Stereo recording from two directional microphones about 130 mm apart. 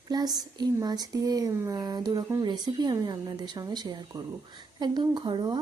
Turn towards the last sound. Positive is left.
turn(degrees=-35)  # may be behind; listen again after turning